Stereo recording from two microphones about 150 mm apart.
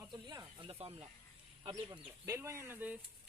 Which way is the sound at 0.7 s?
40° right (ahead or behind).